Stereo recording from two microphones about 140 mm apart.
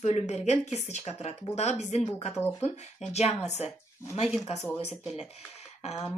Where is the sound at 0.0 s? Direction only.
55° left (ahead or behind).